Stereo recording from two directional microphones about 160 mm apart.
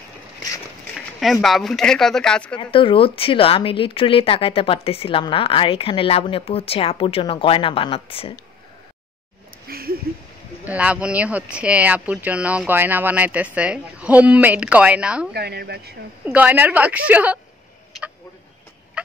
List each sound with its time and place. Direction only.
0.9 s speech: centre (ahead or behind)
2.5 s speech: 30° left (ahead or behind)
9.7 s a sound: 70° right (ahead or behind)
10.6 s speech: 10° right (ahead or behind)
15.3 s speech: 90° right
16.3 s speech: 10° right (ahead or behind)